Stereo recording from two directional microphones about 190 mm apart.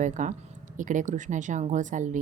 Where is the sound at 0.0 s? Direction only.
40° right (ahead or behind).